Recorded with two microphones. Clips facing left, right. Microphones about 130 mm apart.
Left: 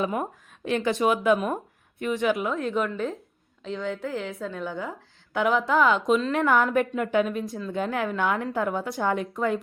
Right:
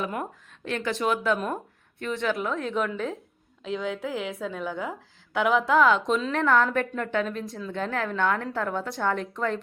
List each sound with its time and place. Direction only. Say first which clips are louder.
0.0 s speech: left 4 dB; 20° left (ahead or behind)
2.1 s a woman's voice: left 2 dB; 5° left (ahead or behind)